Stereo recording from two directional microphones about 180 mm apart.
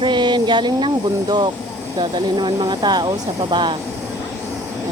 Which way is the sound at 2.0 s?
25° right (ahead or behind).